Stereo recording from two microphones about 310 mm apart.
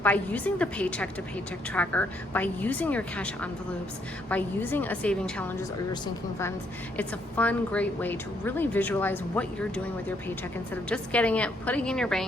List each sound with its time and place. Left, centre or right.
0.0 s a woman's voice: centre
6.9 s a woman's voice: centre